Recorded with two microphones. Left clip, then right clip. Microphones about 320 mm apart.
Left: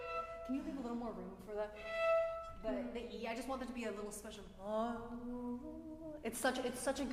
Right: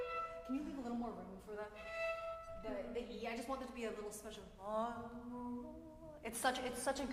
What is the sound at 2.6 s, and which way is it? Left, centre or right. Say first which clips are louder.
A woman's voice: left 2 dB; left.